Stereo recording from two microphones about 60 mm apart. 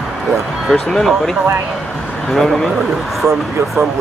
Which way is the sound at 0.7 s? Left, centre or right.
Centre.